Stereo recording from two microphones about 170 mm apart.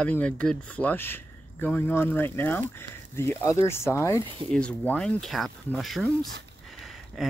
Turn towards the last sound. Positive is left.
turn(degrees=0)  # may be behind; listen again after turning